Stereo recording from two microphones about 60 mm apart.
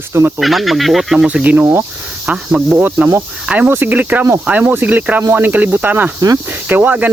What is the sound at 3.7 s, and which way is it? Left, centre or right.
Speech, right.